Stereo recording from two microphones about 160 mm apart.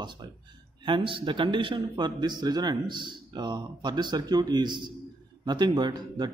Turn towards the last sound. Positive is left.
turn(degrees=-25)  # may be behind; listen again after turning